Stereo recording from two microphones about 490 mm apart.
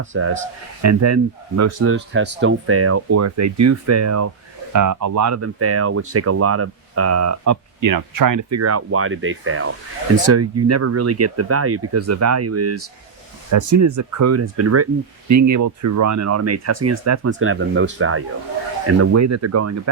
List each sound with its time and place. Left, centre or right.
0.0 s speech: right